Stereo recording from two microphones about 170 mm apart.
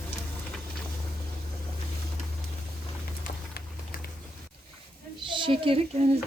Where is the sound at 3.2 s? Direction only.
60° left (ahead or behind).